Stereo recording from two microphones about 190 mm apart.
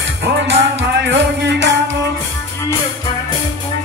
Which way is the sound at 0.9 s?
65° right (ahead or behind).